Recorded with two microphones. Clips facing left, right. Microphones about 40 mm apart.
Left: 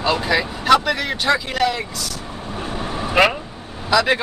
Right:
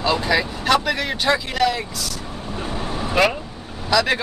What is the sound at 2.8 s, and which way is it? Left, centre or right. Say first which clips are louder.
Vehicle: left 2 dB; left.